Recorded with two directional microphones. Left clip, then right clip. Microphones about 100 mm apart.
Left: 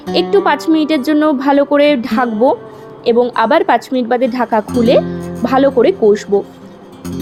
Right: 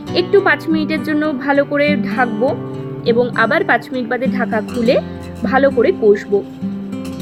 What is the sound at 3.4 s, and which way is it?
Speech, 40° left (ahead or behind).